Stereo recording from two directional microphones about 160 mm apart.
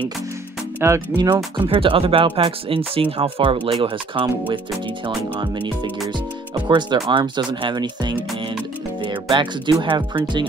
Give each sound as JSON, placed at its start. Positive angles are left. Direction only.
{"t": 0.7, "sound": "speech", "side_deg": -15}
{"t": 1.6, "sound": "speech", "side_deg": -35}